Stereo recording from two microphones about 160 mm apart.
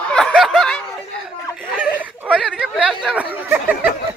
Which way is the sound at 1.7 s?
10° right (ahead or behind).